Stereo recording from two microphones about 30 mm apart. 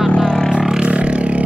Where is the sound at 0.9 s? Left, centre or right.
Right.